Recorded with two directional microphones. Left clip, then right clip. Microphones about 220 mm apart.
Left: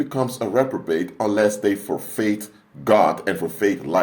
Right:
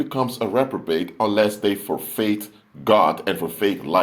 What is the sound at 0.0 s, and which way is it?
Speech, 15° right (ahead or behind).